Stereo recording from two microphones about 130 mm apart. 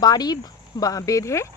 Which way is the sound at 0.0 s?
30° left (ahead or behind).